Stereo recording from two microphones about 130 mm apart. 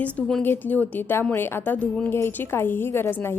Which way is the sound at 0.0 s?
10° left (ahead or behind).